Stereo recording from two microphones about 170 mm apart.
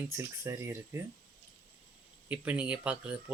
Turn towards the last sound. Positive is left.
turn(degrees=-10)  # may be behind; listen again after turning